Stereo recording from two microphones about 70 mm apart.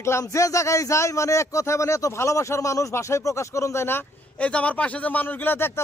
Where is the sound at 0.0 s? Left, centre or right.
Left.